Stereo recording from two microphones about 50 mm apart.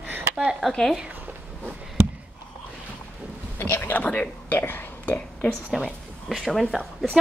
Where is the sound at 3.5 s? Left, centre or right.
Left.